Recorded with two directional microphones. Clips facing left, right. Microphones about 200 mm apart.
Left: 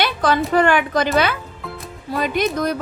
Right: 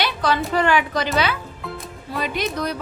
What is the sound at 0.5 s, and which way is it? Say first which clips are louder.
A woman's voice: left 4 dB; 50° left (ahead or behind).